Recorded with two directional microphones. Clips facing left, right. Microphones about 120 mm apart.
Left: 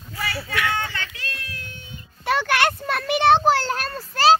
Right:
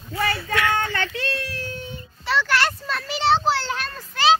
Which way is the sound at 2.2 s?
55° left (ahead or behind).